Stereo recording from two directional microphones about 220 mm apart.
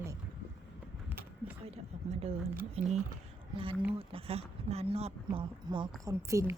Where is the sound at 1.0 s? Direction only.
10° right (ahead or behind).